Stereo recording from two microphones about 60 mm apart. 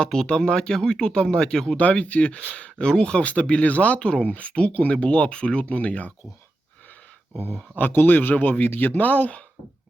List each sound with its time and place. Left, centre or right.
0.0 s speech: centre
1.8 s speech: left
7.8 s speech: left